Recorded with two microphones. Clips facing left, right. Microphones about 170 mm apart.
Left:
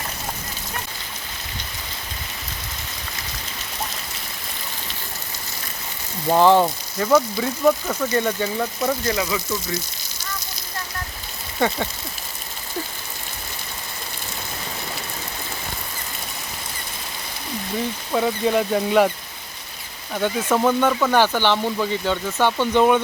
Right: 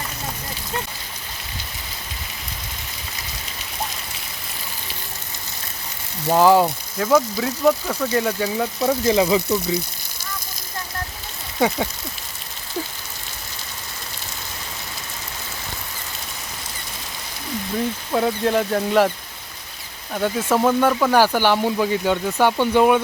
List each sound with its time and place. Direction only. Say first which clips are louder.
6.2 s speech: even; 5° right (ahead or behind)
9.1 s speech: right 7 dB; 30° right (ahead or behind)
18.1 s speech: even; centre (ahead or behind)
20.1 s speech: right 1 dB; 5° right (ahead or behind)